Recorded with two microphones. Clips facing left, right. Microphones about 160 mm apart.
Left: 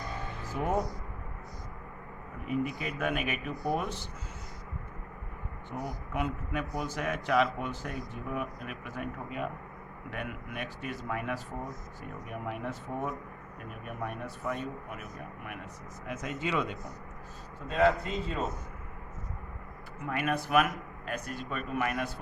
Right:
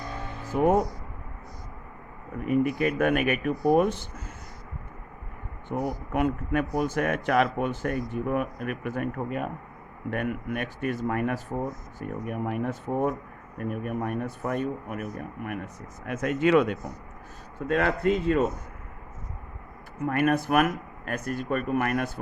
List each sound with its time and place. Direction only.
0.5 s speech: 55° right (ahead or behind)
2.5 s speech: 60° right (ahead or behind)
5.7 s speech: 45° right (ahead or behind)
16.0 s speech: 60° right (ahead or behind)
20.1 s speech: 50° right (ahead or behind)